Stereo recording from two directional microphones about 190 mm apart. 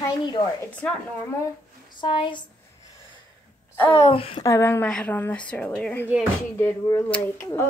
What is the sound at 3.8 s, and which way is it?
Speech, 30° left (ahead or behind).